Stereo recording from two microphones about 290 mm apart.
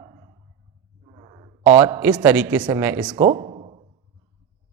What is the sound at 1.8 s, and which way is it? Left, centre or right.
Speech, centre.